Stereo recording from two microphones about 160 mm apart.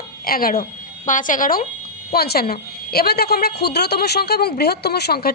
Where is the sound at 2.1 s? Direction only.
75° left (ahead or behind).